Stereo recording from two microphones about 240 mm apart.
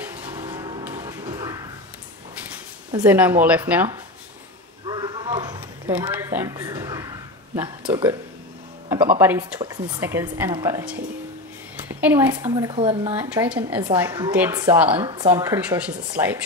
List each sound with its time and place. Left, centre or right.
0.0 s music: centre
0.8 s a sound: centre
3.1 s speech: centre
4.8 s a sound: centre
6.1 s speech: centre
13.1 s a woman's voice: centre